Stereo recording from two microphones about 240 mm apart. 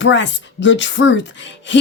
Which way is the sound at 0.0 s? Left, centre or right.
Left.